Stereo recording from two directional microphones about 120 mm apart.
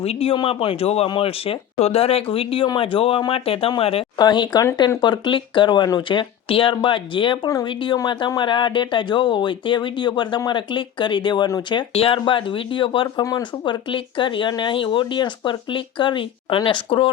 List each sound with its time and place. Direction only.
0.0 s speech: 55° left (ahead or behind)
0.3 s speech: 45° left (ahead or behind)
4.2 s speech: 35° left (ahead or behind)
7.4 s speech: 30° left (ahead or behind)
7.7 s speech: 45° left (ahead or behind)
11.8 s speech: 45° left (ahead or behind)